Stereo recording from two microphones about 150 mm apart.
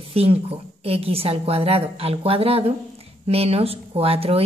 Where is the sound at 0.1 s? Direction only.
40° right (ahead or behind).